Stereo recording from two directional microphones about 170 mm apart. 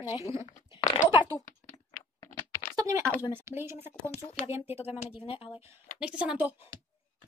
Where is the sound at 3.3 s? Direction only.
15° right (ahead or behind).